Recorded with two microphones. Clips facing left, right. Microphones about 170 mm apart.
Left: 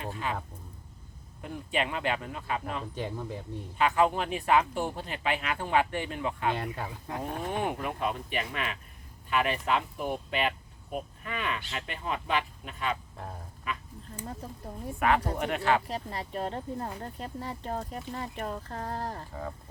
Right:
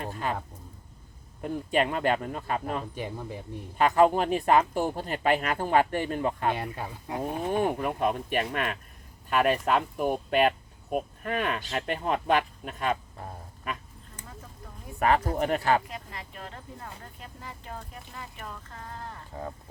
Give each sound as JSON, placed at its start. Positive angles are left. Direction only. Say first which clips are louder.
{"t": 0.0, "sound": "a sound", "louder": "right 3 dB", "side_deg": -45}
{"t": 1.4, "sound": "speech", "louder": "right 5 dB", "side_deg": -45}
{"t": 2.9, "sound": "speech", "louder": "even", "side_deg": -10}
{"t": 3.8, "sound": "speech", "louder": "right 4 dB", "side_deg": -40}
{"t": 6.5, "sound": "speech", "louder": "right 1 dB", "side_deg": -10}
{"t": 7.6, "sound": "speech", "louder": "right 5 dB", "side_deg": -45}
{"t": 14.9, "sound": "speech", "louder": "right 3 dB", "side_deg": -40}
{"t": 15.9, "sound": "speech", "louder": "left 6 dB", "side_deg": 35}